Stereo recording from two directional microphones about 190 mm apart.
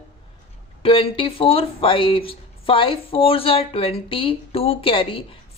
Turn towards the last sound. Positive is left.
turn(degrees=30)  # may be behind; listen again after turning